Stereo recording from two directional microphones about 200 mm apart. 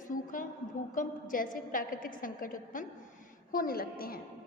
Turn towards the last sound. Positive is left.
turn(degrees=50)  # may be behind; listen again after turning